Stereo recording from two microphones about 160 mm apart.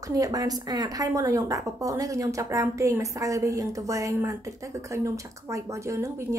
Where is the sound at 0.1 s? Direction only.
20° right (ahead or behind).